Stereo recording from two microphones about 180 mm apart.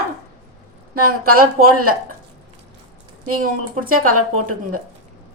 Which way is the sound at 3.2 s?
50° right (ahead or behind).